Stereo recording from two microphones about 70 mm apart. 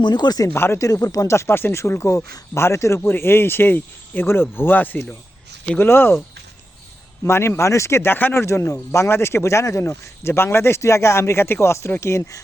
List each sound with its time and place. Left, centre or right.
0.0 s speech: left
0.4 s speech: left
0.8 s speech: left
7.3 s speech: left